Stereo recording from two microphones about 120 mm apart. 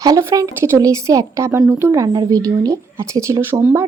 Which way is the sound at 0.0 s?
30° right (ahead or behind).